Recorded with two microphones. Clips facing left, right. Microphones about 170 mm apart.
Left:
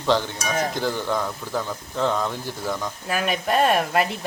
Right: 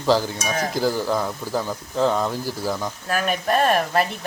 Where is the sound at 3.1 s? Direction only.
5° left (ahead or behind).